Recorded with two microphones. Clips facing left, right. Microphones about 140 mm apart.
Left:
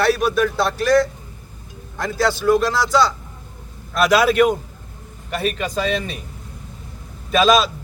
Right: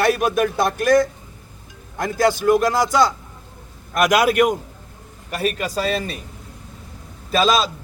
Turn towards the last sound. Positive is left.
turn(degrees=-30)  # may be behind; listen again after turning